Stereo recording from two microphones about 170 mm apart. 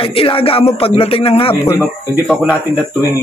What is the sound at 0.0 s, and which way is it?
A man's voice, 30° left (ahead or behind).